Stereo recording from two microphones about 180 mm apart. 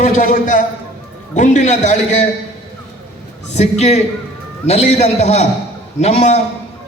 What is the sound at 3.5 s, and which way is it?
A man's voice, 40° left (ahead or behind).